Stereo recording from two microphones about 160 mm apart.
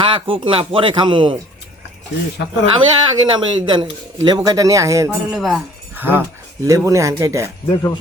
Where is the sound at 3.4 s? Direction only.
30° right (ahead or behind).